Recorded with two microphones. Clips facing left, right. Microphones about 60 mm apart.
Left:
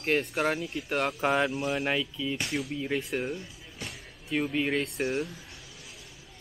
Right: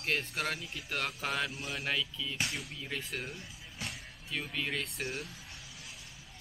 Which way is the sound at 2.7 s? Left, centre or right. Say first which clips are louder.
Left 10 dB; centre.